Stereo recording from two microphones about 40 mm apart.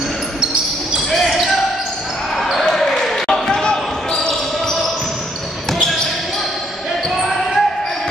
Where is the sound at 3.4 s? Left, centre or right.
Centre.